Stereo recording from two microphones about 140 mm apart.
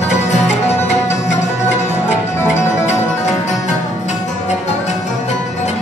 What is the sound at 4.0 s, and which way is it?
Music, 55° left (ahead or behind).